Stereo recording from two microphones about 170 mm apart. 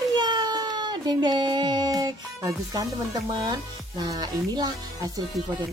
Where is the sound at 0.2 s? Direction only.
25° right (ahead or behind).